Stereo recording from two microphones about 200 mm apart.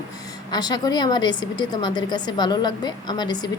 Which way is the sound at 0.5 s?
20° left (ahead or behind).